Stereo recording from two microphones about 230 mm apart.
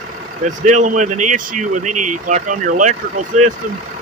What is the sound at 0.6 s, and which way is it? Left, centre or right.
Speech, right.